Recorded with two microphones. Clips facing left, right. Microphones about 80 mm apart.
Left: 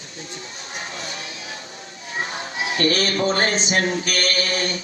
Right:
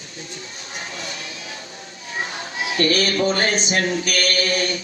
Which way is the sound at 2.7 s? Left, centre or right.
Left.